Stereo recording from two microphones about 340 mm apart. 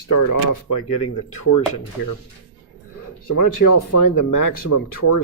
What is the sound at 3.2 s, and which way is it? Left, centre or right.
Speech, left.